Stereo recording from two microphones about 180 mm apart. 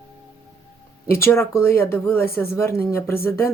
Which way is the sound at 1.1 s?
15° left (ahead or behind).